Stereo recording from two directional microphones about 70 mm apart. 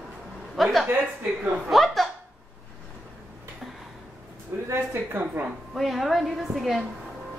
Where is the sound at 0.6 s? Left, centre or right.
Centre.